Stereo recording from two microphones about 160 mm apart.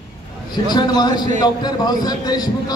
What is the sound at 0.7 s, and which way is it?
A man's voice, 25° left (ahead or behind).